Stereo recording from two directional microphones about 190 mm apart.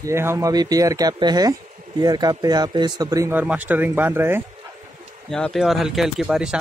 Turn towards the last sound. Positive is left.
turn(degrees=-5)  # may be behind; listen again after turning